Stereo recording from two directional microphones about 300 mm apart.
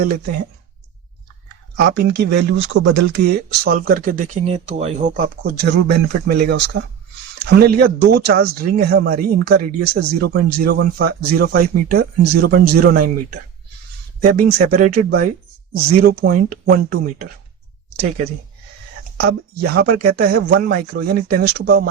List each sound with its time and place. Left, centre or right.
1.7 s speech: right
19.1 s speech: right